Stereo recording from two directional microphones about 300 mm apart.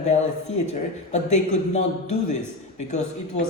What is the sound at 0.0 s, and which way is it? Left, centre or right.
A man's voice, left.